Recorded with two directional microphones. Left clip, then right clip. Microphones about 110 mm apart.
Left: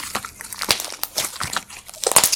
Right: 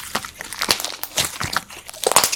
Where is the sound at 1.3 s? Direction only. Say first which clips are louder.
Right 2 dB; centre (ahead or behind).